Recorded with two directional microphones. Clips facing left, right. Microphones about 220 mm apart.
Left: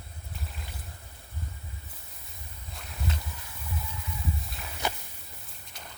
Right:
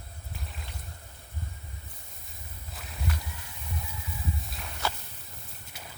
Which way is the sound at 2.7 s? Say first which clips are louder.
Left 1 dB; centre (ahead or behind).